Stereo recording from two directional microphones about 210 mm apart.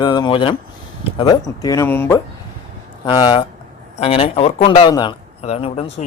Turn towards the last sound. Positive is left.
turn(degrees=30)  # may be behind; listen again after turning